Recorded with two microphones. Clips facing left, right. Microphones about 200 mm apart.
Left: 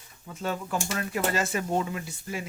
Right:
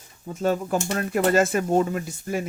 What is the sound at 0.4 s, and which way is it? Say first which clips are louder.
Speech: right 7 dB; 45° right (ahead or behind).